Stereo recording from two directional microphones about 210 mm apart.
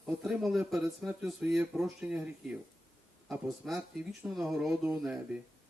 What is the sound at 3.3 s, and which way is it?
Speech, centre (ahead or behind).